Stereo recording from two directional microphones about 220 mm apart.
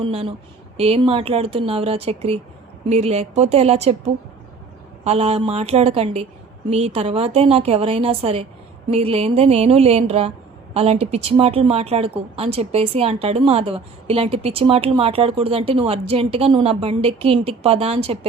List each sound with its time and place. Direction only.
0.0 s a woman's voice: 25° right (ahead or behind)